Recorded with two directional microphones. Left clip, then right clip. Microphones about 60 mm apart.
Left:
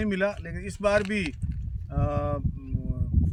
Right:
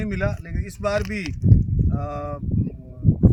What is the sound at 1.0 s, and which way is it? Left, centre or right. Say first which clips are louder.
Speech: even; centre.